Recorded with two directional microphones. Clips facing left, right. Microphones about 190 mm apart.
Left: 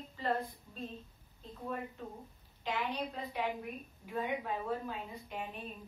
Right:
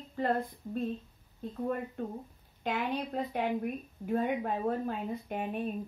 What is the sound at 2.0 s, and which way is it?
A woman's voice, 55° right (ahead or behind).